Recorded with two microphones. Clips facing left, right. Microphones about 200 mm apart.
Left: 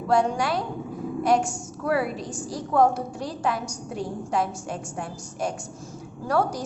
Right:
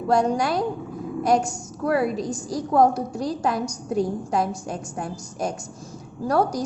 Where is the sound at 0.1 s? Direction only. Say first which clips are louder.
Right 2 dB; 40° right (ahead or behind).